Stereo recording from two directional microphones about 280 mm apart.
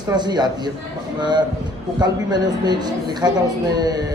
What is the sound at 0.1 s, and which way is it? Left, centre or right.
A woman's voice, centre.